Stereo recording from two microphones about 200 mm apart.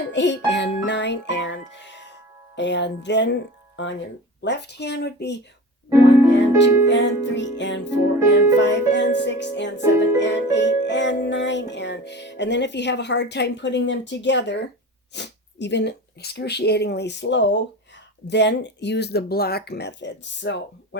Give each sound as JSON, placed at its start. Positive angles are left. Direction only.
{"t": 0.1, "sound": "music", "side_deg": 65}